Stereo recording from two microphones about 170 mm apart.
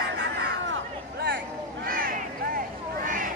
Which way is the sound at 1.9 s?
55° right (ahead or behind).